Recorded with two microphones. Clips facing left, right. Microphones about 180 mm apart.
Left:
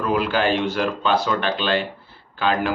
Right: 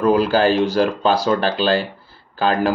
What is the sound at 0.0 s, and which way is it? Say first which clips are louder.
Speech: right 6 dB; 35° right (ahead or behind).